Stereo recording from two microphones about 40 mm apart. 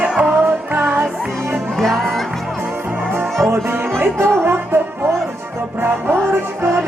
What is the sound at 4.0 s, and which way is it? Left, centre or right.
Music, right.